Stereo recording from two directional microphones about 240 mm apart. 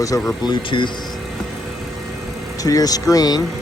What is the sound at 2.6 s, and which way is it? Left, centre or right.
Speech, centre.